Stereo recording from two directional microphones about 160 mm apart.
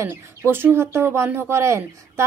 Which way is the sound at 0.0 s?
15° right (ahead or behind).